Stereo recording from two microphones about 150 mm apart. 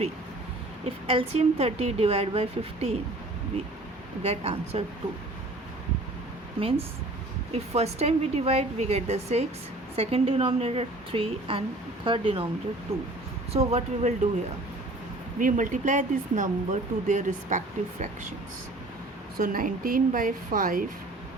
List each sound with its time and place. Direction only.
0.9 s a woman's voice: 40° right (ahead or behind)
4.2 s a woman's voice: 45° right (ahead or behind)
6.6 s a woman's voice: 40° right (ahead or behind)
15.4 s speech: 60° right (ahead or behind)
19.4 s a woman's voice: 70° right (ahead or behind)